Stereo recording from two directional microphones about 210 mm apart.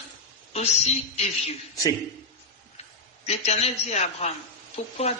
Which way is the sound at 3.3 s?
30° left (ahead or behind).